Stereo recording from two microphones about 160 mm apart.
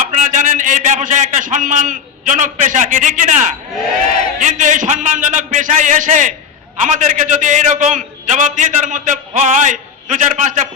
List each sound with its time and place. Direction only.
0.0 s a man's voice: 55° right (ahead or behind)